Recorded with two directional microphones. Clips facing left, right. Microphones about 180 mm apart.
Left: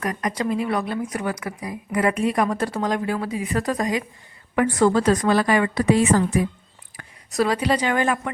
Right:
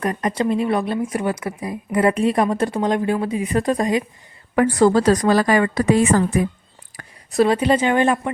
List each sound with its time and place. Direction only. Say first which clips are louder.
0.0 s speech: right 4 dB; 30° right (ahead or behind)
4.5 s a woman's voice: right 3 dB; 35° right (ahead or behind); by 6.5 s 50° right (ahead or behind)
7.0 s a sound: right 2 dB; 40° right (ahead or behind)
7.3 s speech: right 5 dB; 25° right (ahead or behind)